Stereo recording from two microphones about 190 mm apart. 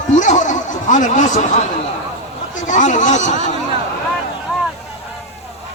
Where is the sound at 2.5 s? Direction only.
40° left (ahead or behind).